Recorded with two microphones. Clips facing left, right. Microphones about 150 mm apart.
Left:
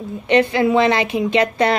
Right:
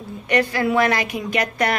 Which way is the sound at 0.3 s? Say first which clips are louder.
Left 5 dB; 25° left (ahead or behind).